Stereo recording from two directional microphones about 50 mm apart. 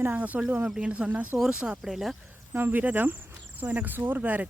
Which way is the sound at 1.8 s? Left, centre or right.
Centre.